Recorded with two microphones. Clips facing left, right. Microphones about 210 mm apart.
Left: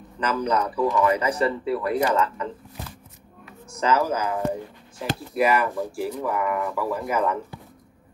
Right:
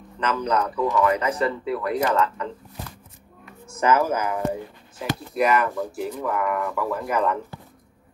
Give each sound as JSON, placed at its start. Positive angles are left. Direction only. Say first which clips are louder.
{"t": 0.2, "sound": "speech", "louder": "even", "side_deg": 10}
{"t": 3.8, "sound": "speech", "louder": "right 2 dB", "side_deg": -55}
{"t": 4.9, "sound": "speech", "louder": "even", "side_deg": 5}